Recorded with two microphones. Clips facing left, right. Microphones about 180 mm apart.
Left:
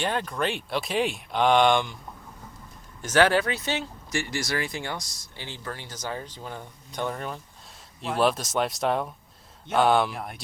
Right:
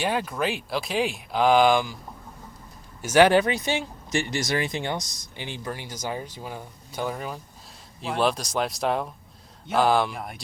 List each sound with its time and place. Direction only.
0.0 s speech: 5° right (ahead or behind)
3.0 s speech: 10° right (ahead or behind)